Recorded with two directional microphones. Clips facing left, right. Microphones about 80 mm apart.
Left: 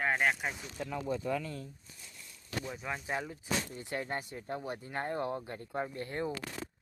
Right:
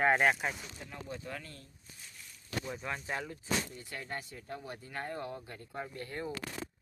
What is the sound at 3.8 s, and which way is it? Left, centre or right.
Speech, left.